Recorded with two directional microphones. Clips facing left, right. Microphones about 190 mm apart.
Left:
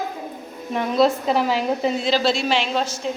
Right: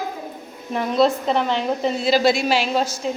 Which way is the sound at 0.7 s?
Centre (ahead or behind).